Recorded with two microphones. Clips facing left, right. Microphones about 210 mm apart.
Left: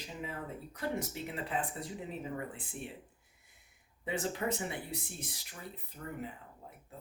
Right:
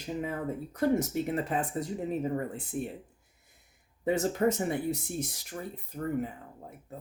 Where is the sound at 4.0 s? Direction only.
45° right (ahead or behind).